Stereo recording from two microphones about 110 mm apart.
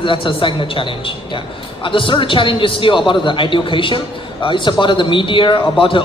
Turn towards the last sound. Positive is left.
turn(degrees=50)  # may be behind; listen again after turning